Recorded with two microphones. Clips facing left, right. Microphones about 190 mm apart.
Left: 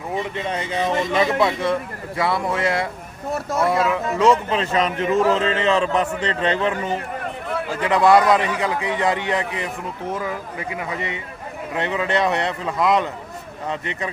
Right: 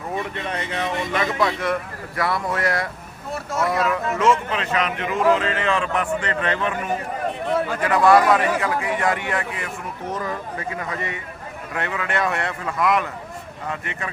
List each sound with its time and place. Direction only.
0.1 s speech: 20° left (ahead or behind)